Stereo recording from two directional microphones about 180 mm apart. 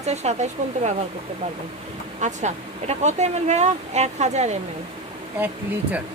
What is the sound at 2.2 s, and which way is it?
A woman's voice, 40° right (ahead or behind).